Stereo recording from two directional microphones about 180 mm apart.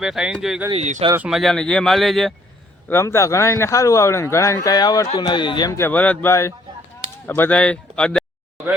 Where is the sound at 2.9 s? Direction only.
15° left (ahead or behind).